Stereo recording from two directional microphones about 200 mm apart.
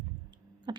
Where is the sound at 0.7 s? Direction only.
20° right (ahead or behind).